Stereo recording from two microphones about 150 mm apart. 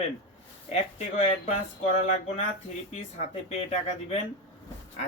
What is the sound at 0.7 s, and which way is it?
Speech, 45° left (ahead or behind).